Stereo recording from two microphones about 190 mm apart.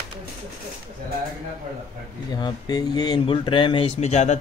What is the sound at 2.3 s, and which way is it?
Speech, 20° left (ahead or behind).